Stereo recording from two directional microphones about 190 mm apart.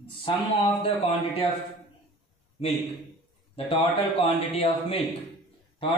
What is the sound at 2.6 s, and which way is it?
Speech, 35° left (ahead or behind).